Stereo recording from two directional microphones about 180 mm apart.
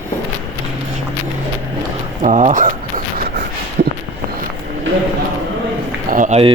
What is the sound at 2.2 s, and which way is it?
Speech, 45° right (ahead or behind).